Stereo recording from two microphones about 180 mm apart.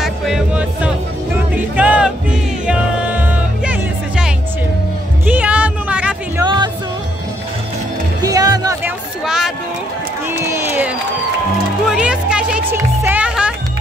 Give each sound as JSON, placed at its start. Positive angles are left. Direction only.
{"t": 0.0, "sound": "music", "side_deg": 0}
{"t": 6.4, "sound": "music", "side_deg": -25}
{"t": 8.2, "sound": "music", "side_deg": -20}
{"t": 9.2, "sound": "a sound", "side_deg": -5}
{"t": 11.9, "sound": "music", "side_deg": -5}